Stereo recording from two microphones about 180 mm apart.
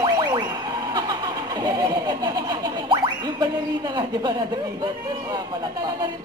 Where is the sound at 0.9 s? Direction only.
20° right (ahead or behind).